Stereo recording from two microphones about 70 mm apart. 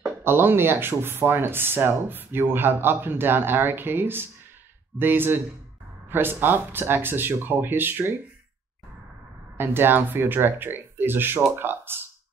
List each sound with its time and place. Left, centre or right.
0.2 s speech: right
9.6 s speech: right
11.5 s a sound: right